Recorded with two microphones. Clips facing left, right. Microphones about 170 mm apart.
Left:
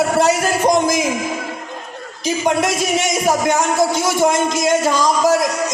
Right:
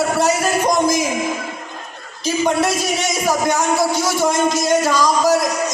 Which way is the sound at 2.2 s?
20° left (ahead or behind).